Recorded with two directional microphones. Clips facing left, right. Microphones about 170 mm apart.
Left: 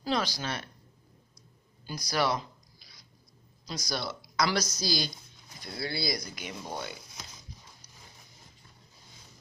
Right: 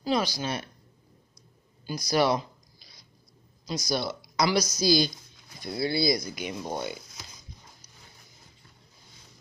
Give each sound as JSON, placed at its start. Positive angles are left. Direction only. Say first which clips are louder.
{"t": 0.0, "sound": "speech", "louder": "right 4 dB", "side_deg": -15}
{"t": 2.0, "sound": "speech", "louder": "right 5 dB", "side_deg": -20}
{"t": 3.6, "sound": "speech", "louder": "right 6 dB", "side_deg": -15}